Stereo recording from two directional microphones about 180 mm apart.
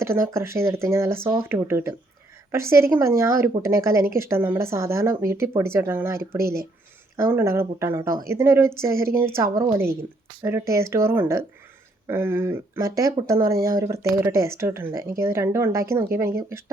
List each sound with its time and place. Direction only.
0.0 s speech: 15° right (ahead or behind)
6.4 s speech: 55° right (ahead or behind)
7.2 s speech: 15° right (ahead or behind)